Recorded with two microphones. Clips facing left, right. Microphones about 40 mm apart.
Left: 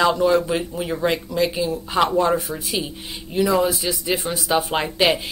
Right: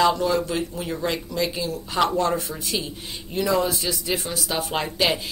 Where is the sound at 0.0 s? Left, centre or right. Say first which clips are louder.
Left 3 dB; centre.